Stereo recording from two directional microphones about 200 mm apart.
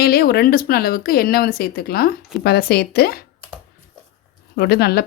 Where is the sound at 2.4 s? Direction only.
55° left (ahead or behind).